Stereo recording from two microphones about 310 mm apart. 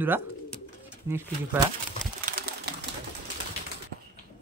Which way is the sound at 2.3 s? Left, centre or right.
Right.